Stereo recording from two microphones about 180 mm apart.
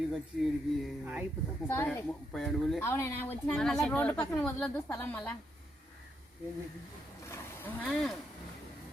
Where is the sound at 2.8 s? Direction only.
15° left (ahead or behind).